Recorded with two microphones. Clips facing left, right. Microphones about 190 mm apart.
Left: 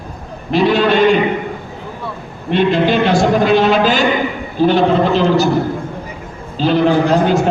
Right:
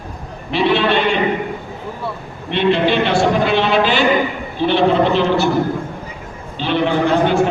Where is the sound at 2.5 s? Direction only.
40° left (ahead or behind).